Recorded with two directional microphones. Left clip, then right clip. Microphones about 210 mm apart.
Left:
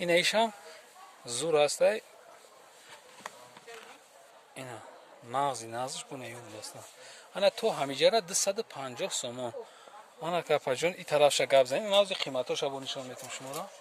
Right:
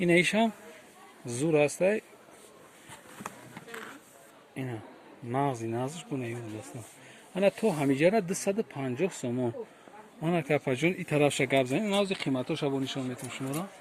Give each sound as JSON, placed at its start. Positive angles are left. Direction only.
{"t": 0.0, "sound": "a man's voice", "side_deg": 35}
{"t": 4.5, "sound": "a man's voice", "side_deg": 20}